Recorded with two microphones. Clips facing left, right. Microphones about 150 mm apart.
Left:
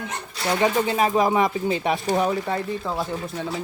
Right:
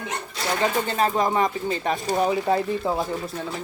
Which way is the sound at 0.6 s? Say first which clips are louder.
Left 2 dB; 10° left (ahead or behind).